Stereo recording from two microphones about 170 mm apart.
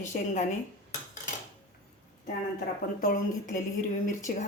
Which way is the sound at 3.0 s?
50° left (ahead or behind).